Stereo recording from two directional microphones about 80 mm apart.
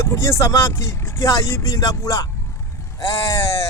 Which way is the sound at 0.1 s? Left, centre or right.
Left.